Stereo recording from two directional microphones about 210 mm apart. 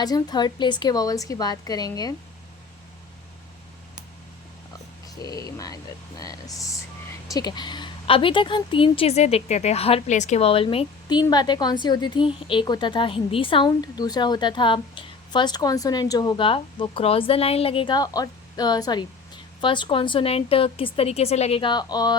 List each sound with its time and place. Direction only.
0.0 s a woman's voice: 20° left (ahead or behind)
5.0 s a woman's voice: 20° left (ahead or behind)